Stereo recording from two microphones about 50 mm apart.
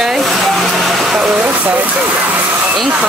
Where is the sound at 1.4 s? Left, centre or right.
Right.